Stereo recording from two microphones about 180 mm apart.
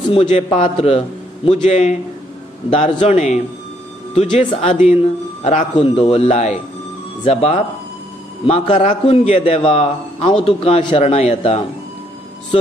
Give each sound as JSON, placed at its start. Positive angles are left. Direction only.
{"t": 0.1, "sound": "speech", "side_deg": 40}